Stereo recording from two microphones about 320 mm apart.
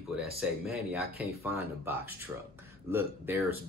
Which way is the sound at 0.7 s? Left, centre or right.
Centre.